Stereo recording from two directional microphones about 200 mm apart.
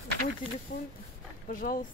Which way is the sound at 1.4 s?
45° left (ahead or behind).